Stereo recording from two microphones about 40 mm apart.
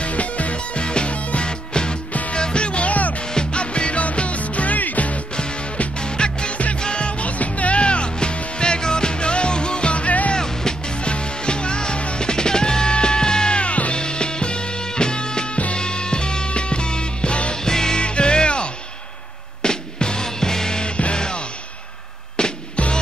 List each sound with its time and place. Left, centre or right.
0.0 s music: left
3.3 s music: left
5.9 s music: left
10.3 s music: centre; by 13.9 s left
13.9 s music: left
22.4 s music: left